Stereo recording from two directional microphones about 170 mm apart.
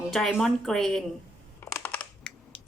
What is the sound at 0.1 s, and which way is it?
Speech, 5° left (ahead or behind).